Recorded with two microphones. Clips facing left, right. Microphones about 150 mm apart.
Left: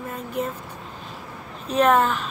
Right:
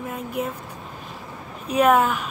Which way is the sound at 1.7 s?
10° right (ahead or behind).